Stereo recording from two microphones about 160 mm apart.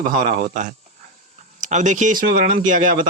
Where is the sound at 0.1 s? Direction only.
60° right (ahead or behind).